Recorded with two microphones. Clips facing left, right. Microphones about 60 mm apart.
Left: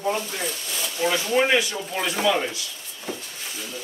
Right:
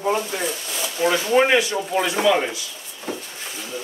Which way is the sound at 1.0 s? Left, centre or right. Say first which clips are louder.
Right 4 dB; centre.